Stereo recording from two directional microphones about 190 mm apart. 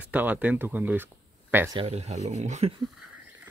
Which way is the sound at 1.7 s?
30° right (ahead or behind).